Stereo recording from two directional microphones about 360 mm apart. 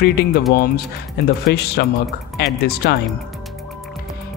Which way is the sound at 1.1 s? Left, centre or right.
Left.